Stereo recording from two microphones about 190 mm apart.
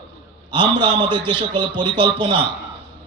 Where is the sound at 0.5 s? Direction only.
25° right (ahead or behind).